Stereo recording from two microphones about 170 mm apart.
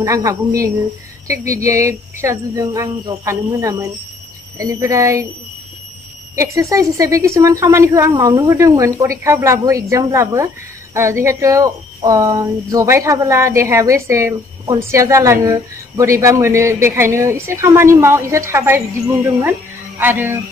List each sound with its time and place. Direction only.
0.0 s a woman's voice: 20° right (ahead or behind)
6.3 s speech: 20° right (ahead or behind)
20.0 s speech: 10° right (ahead or behind)